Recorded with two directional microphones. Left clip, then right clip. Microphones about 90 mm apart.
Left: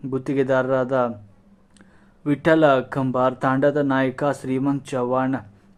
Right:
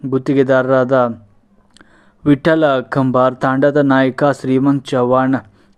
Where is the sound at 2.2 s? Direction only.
50° right (ahead or behind).